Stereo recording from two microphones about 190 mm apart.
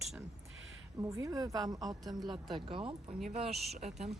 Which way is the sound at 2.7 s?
25° right (ahead or behind).